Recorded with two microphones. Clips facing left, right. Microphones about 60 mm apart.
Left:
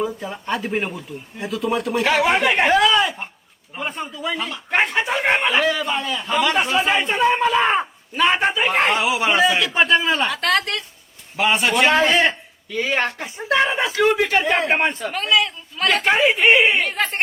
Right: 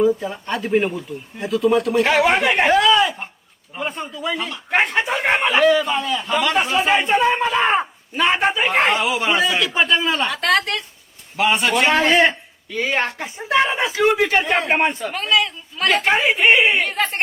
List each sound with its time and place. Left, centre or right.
0.0 s speech: centre
12.7 s speech: centre
14.4 s speech: centre